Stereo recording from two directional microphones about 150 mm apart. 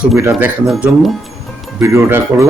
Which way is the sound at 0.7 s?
Centre (ahead or behind).